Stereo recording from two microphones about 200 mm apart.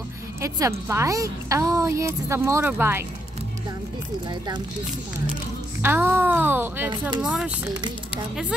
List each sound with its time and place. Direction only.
0.4 s a woman's voice: 15° right (ahead or behind)
4.3 s speech: 20° right (ahead or behind)
5.8 s a woman's voice: 10° right (ahead or behind)